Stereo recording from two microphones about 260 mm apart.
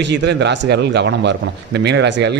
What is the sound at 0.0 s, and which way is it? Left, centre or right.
A man's voice, right.